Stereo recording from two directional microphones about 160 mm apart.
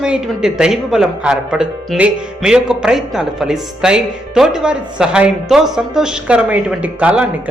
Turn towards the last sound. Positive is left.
turn(degrees=-10)  # may be behind; listen again after turning